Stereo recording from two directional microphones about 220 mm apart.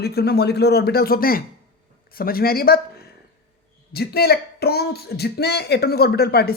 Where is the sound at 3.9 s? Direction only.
45° left (ahead or behind).